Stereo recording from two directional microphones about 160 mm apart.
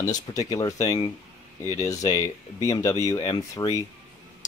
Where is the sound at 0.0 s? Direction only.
25° left (ahead or behind).